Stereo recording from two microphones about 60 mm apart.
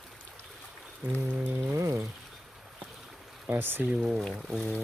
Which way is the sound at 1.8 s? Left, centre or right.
Right.